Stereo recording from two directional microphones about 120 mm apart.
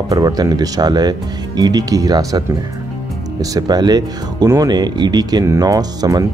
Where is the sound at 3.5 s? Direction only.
35° right (ahead or behind).